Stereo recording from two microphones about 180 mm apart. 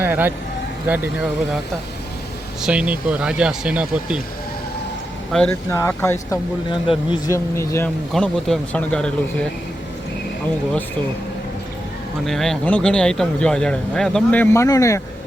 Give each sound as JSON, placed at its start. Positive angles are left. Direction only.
{"t": 0.0, "sound": "speech", "side_deg": -10}
{"t": 2.6, "sound": "speech", "side_deg": -5}
{"t": 5.3, "sound": "speech", "side_deg": 5}
{"t": 6.7, "sound": "speech", "side_deg": 30}
{"t": 7.3, "sound": "speech", "side_deg": 15}
{"t": 8.1, "sound": "speech", "side_deg": 5}
{"t": 12.2, "sound": "speech", "side_deg": 0}